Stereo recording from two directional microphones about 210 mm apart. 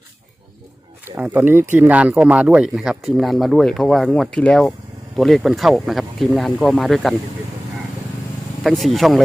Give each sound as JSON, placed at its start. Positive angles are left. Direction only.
{"t": 1.0, "sound": "speech", "side_deg": -10}
{"t": 8.6, "sound": "speech", "side_deg": 0}